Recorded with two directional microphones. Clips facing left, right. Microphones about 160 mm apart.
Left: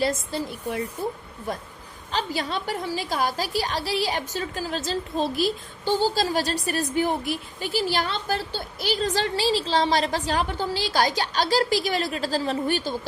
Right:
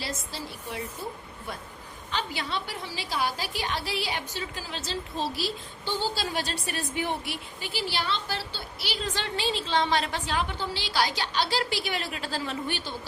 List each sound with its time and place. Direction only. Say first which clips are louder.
0.0 s a woman's voice: left 10 dB; 50° left (ahead or behind)